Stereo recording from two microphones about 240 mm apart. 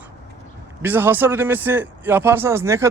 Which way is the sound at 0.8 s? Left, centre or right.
Centre.